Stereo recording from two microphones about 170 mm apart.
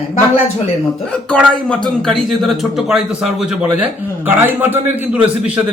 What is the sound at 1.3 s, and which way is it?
Speech, 5° left (ahead or behind).